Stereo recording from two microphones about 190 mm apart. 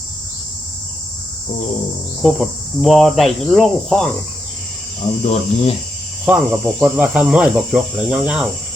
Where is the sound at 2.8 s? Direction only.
Centre (ahead or behind).